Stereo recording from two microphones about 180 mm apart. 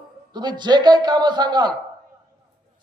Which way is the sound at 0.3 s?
25° right (ahead or behind).